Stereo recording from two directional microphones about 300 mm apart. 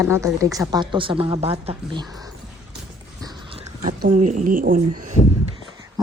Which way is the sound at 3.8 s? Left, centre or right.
Right.